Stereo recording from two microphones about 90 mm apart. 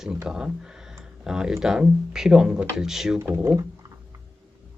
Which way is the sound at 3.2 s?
25° right (ahead or behind).